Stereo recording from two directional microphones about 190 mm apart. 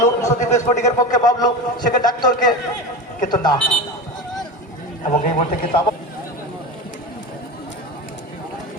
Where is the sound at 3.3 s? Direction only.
20° left (ahead or behind).